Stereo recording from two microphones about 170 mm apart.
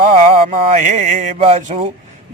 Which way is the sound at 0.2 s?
40° right (ahead or behind).